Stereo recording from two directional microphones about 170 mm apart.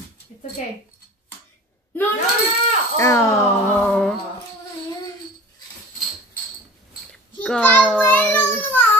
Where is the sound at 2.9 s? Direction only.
15° left (ahead or behind).